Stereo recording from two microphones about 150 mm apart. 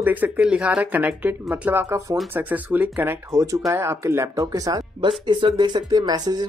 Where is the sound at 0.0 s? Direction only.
10° right (ahead or behind).